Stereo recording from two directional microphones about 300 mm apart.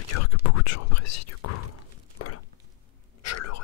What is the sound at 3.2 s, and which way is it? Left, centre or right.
Whispering, left.